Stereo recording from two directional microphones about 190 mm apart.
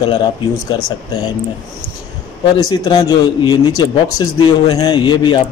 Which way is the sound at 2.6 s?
20° left (ahead or behind).